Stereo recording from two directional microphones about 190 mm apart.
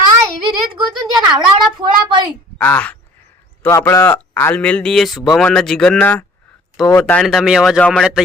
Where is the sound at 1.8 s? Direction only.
25° right (ahead or behind).